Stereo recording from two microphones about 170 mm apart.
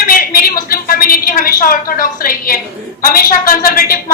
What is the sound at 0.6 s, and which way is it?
A woman's voice, 60° left (ahead or behind).